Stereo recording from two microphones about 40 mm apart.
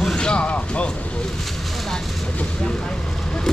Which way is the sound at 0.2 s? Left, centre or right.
Left.